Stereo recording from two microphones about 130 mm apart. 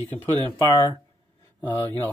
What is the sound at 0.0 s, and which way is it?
Speech, 15° left (ahead or behind).